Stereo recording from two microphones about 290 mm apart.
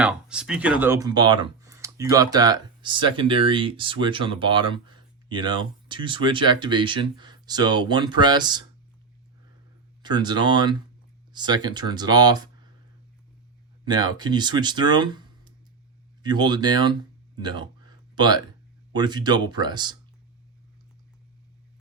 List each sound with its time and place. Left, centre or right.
0.0 s speech: centre
10.0 s speech: centre
13.8 s speech: centre